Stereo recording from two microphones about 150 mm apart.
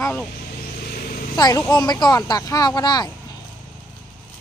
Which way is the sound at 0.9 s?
75° left (ahead or behind).